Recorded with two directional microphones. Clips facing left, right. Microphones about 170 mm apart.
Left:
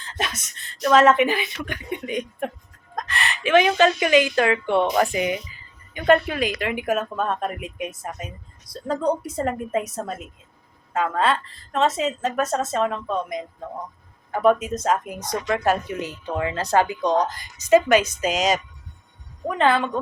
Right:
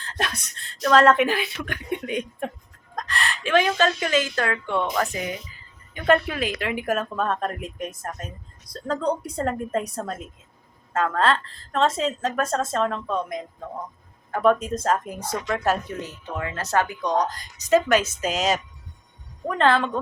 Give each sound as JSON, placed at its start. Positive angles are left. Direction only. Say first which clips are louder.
{"t": 0.0, "sound": "a woman's voice", "louder": "even", "side_deg": 0}
{"t": 5.9, "sound": "speech", "louder": "left 2 dB", "side_deg": 0}
{"t": 16.3, "sound": "a woman's voice", "louder": "left 4 dB", "side_deg": 20}
{"t": 17.3, "sound": "speech", "louder": "left 3 dB", "side_deg": 0}